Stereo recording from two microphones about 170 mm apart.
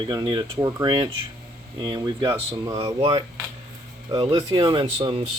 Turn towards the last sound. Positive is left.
turn(degrees=-30)  # may be behind; listen again after turning